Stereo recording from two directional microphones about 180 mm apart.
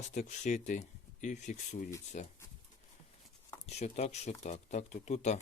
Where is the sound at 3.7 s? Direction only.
35° left (ahead or behind).